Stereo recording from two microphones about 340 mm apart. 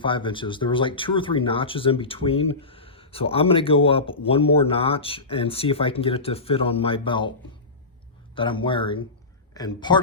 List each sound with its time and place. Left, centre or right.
0.0 s speech: centre
8.4 s speech: centre